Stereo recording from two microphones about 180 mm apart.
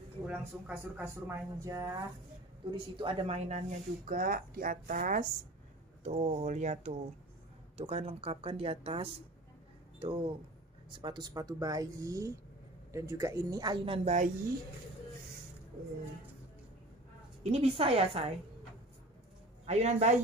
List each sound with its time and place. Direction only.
0.3 s speech: 10° right (ahead or behind)
2.7 s speech: 30° right (ahead or behind)
17.4 s speech: 35° right (ahead or behind)
19.6 s speech: 40° right (ahead or behind)